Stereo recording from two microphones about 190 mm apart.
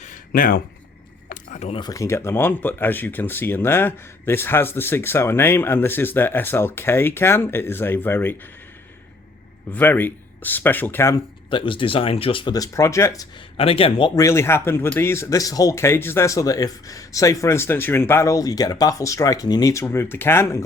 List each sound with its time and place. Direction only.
0.0 s a sound: 45° left (ahead or behind)
1.8 s speech: 15° left (ahead or behind)
9.7 s speech: 10° left (ahead or behind)
11.5 s speech: 25° left (ahead or behind)
13.6 s speech: 30° left (ahead or behind)
14.2 s speech: 15° left (ahead or behind)